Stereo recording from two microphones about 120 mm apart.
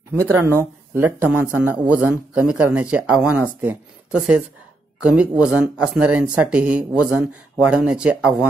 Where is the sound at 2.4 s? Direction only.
10° right (ahead or behind).